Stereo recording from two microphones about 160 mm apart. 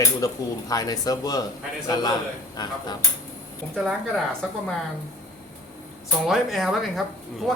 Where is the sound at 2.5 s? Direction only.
25° left (ahead or behind).